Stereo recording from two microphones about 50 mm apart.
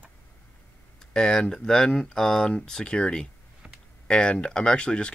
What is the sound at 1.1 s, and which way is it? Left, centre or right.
Speech, centre.